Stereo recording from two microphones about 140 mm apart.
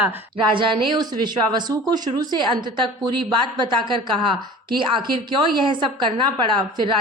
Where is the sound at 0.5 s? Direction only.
35° right (ahead or behind).